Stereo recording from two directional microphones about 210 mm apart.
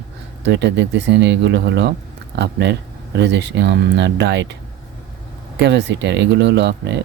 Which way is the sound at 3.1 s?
55° right (ahead or behind).